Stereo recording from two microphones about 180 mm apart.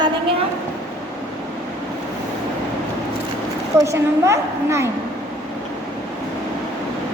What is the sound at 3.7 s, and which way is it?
A woman's voice, 15° right (ahead or behind).